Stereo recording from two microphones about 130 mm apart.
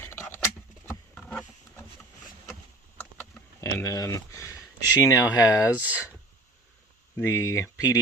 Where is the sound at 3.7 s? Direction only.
25° left (ahead or behind).